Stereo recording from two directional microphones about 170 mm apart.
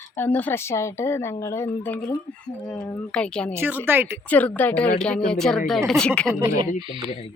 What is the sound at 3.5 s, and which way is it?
Speech, 10° right (ahead or behind).